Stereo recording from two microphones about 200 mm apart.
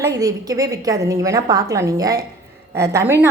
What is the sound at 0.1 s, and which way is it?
A woman's voice, 15° right (ahead or behind).